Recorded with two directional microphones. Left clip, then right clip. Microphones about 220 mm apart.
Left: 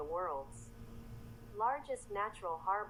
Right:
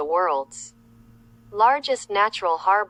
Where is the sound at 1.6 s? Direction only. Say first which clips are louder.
Right 18 dB; 50° right (ahead or behind).